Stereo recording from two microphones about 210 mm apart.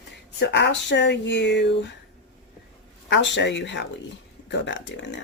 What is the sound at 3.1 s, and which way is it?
Speech, 55° left (ahead or behind).